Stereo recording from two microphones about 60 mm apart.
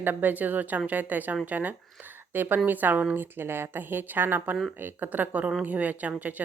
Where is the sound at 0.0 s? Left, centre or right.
Right.